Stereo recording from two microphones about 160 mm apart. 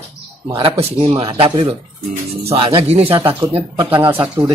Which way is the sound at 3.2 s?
20° right (ahead or behind).